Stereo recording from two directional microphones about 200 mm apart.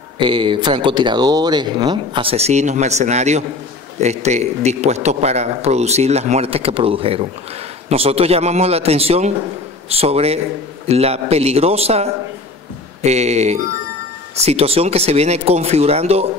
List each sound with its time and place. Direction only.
0.2 s speech: 25° right (ahead or behind)